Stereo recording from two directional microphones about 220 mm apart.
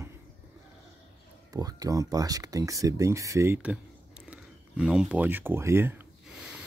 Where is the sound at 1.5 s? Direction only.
15° right (ahead or behind).